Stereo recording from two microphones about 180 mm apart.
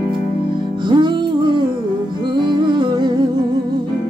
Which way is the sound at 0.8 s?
25° right (ahead or behind).